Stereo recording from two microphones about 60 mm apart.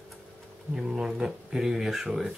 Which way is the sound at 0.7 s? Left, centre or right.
Centre.